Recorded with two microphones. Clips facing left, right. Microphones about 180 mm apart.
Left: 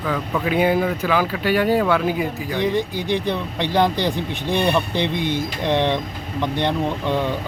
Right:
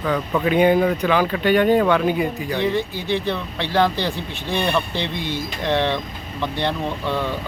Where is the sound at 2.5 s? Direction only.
15° left (ahead or behind).